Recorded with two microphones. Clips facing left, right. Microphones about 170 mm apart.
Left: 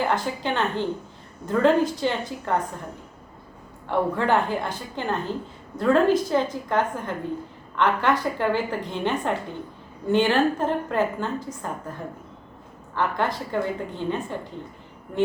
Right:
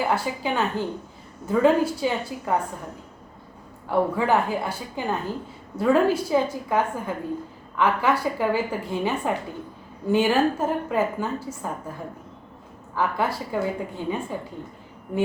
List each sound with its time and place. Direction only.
0.0 s a woman's voice: 5° right (ahead or behind)
3.8 s a woman's voice: 5° right (ahead or behind)
12.9 s a woman's voice: 5° right (ahead or behind)